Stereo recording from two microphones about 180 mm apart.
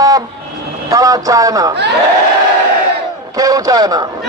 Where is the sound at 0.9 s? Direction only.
20° right (ahead or behind).